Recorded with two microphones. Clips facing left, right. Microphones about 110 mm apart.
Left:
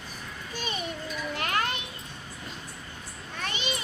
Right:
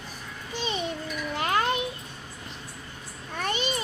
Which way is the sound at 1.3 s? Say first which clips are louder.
Right 4 dB; 25° right (ahead or behind).